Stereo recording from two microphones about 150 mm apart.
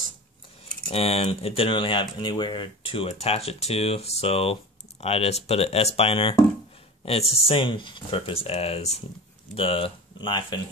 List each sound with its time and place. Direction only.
0.9 s speech: 40° left (ahead or behind)